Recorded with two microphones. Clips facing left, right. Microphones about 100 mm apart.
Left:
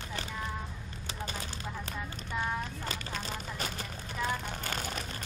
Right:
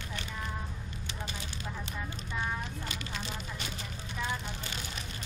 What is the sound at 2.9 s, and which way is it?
Vehicle, 40° left (ahead or behind).